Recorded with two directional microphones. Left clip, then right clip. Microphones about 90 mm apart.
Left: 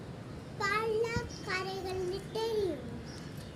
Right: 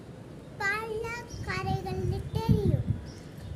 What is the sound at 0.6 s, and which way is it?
Child singing, 30° right (ahead or behind).